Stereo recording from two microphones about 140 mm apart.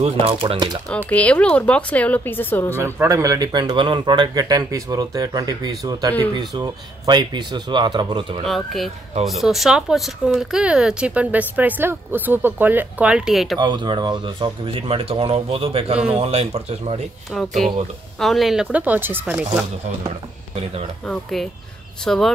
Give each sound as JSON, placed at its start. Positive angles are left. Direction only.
{"t": 0.0, "sound": "speech", "side_deg": -45}
{"t": 0.9, "sound": "speech", "side_deg": 10}
{"t": 2.8, "sound": "speech", "side_deg": -20}
{"t": 8.5, "sound": "speech", "side_deg": 0}
{"t": 13.6, "sound": "speech", "side_deg": -35}
{"t": 17.3, "sound": "speech", "side_deg": 0}
{"t": 21.0, "sound": "speech", "side_deg": 0}